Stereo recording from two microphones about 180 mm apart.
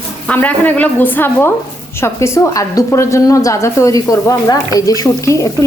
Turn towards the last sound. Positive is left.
turn(degrees=15)  # may be behind; listen again after turning